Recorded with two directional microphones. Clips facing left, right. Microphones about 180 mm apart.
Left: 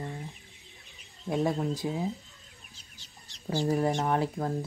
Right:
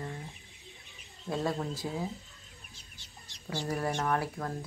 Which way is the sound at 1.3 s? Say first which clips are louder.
Left 4 dB; 20° left (ahead or behind).